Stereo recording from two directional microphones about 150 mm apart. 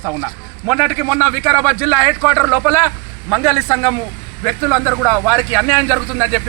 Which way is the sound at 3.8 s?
5° right (ahead or behind).